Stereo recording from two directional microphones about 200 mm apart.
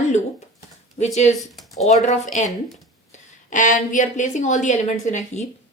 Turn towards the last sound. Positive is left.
turn(degrees=35)  # may be behind; listen again after turning